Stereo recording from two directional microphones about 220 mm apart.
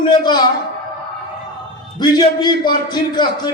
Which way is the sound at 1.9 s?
20° left (ahead or behind).